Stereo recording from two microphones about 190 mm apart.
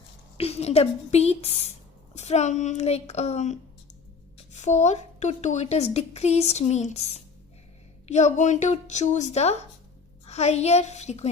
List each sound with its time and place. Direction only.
0.3 s a woman's voice: 30° left (ahead or behind)